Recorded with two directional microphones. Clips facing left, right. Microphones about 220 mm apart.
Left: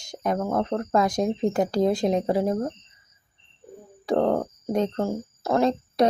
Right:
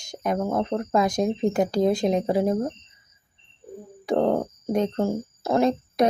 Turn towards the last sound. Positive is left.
turn(degrees=-20)  # may be behind; listen again after turning